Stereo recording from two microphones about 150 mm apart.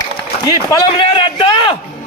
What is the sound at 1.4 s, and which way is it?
Speech, 30° left (ahead or behind).